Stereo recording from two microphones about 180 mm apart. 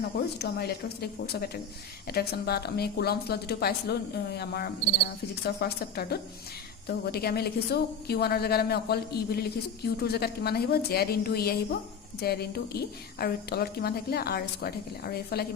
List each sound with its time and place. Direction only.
0.3 s a woman's voice: 65° left (ahead or behind)